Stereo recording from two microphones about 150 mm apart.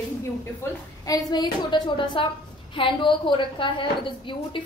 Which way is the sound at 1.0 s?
25° left (ahead or behind).